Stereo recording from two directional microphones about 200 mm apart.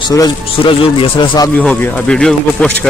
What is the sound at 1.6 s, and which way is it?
Speech, 5° left (ahead or behind).